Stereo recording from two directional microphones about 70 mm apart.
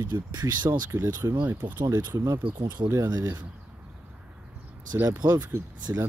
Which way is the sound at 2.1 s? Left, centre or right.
Right.